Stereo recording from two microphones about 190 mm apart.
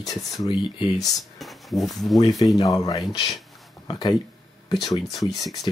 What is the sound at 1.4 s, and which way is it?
Speech, centre (ahead or behind).